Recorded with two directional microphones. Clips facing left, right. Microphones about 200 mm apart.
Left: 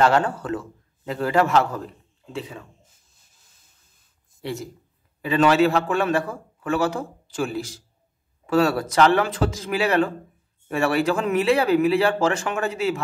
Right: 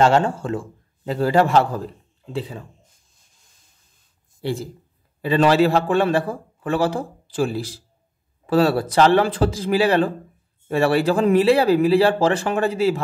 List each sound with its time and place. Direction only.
0.0 s a man's voice: 25° right (ahead or behind)
4.4 s a man's voice: 30° right (ahead or behind)